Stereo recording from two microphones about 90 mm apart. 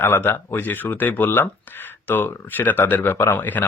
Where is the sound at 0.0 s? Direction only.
25° left (ahead or behind).